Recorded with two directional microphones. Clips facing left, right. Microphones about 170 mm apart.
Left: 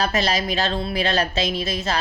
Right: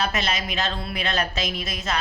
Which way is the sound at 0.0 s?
35° left (ahead or behind).